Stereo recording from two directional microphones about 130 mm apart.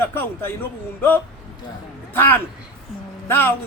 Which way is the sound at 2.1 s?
15° left (ahead or behind).